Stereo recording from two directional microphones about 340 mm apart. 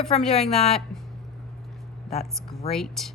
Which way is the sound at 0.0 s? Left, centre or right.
Centre.